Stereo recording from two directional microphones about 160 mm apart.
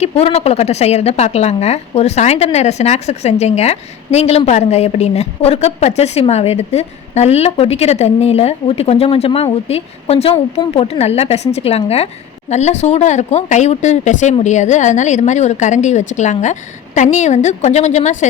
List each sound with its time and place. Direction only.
0.0 s speech: 40° left (ahead or behind)